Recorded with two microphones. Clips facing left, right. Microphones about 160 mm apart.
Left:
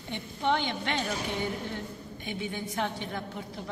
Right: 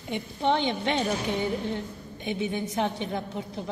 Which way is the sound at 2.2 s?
20° right (ahead or behind).